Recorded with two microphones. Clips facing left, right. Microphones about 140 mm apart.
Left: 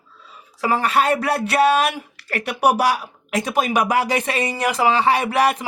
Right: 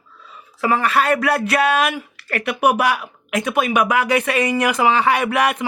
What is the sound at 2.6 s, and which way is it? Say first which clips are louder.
Speech: even; 35° left (ahead or behind).